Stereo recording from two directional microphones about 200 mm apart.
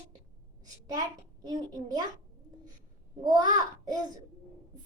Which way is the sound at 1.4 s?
20° right (ahead or behind).